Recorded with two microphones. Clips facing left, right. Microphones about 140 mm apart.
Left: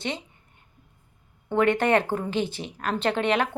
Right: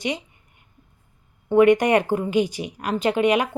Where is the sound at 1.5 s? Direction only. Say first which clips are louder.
Right 6 dB; 10° right (ahead or behind).